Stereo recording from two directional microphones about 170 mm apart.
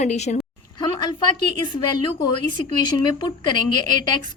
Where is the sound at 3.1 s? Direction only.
25° left (ahead or behind).